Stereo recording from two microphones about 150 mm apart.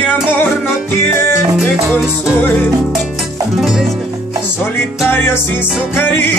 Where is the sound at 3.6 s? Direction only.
Centre (ahead or behind).